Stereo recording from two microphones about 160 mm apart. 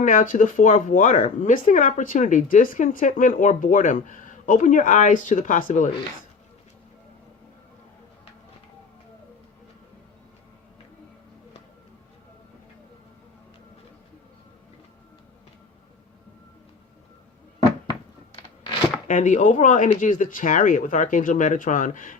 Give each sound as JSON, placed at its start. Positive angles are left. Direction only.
{"t": 0.0, "sound": "speech", "side_deg": 55}
{"t": 19.0, "sound": "speech", "side_deg": 50}